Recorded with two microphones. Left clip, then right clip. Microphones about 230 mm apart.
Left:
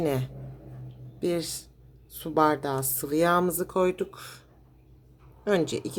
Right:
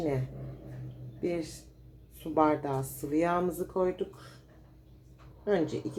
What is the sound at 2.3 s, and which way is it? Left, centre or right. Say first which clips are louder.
Speech: left 3 dB; left.